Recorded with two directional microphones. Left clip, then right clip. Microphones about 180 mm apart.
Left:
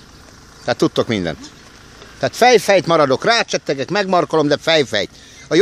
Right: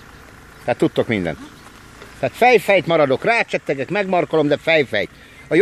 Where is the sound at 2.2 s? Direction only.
25° left (ahead or behind).